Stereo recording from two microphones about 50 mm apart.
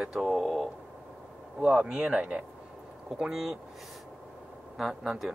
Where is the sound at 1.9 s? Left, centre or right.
Centre.